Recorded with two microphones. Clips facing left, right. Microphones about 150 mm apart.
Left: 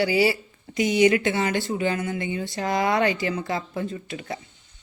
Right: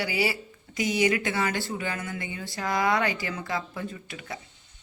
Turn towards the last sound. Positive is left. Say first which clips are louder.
# left 6 dB
turn(degrees=30)  # may be behind; listen again after turning